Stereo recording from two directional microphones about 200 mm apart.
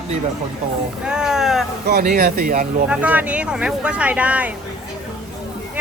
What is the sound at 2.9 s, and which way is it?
Speech, 5° right (ahead or behind).